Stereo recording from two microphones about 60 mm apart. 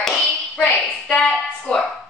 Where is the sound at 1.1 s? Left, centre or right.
Centre.